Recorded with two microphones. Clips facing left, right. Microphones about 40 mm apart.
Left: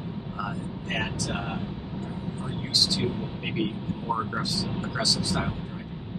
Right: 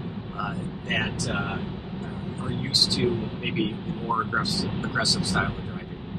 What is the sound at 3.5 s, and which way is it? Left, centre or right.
Speech, centre.